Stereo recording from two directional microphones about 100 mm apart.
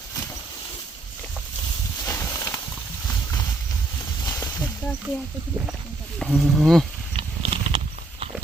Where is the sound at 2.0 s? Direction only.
25° left (ahead or behind).